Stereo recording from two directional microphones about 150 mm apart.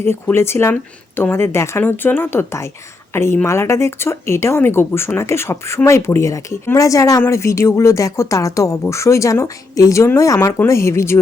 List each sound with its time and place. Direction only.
0.0 s speech: 15° left (ahead or behind)